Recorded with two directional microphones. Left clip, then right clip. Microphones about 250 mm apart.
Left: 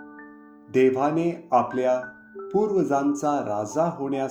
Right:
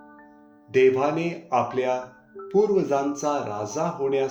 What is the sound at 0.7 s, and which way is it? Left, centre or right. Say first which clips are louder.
Speech: right 1 dB; left.